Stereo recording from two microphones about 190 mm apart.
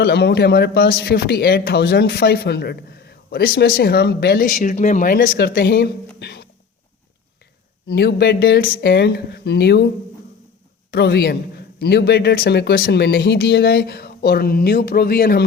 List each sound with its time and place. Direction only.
0.0 s a man's voice: 60° left (ahead or behind)
7.9 s a man's voice: 60° left (ahead or behind)
10.9 s a man's voice: 55° left (ahead or behind)